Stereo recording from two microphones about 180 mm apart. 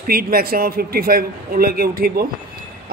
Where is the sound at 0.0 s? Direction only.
55° right (ahead or behind).